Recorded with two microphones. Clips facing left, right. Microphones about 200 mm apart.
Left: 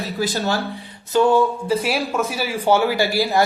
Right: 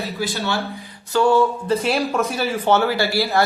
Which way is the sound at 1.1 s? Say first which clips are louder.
Even; 20° left (ahead or behind).